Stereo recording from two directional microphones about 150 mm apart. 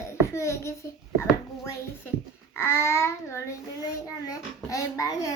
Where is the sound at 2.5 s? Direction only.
15° left (ahead or behind).